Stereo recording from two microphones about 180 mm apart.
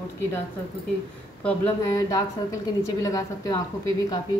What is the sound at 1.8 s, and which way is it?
A woman's voice, 20° left (ahead or behind).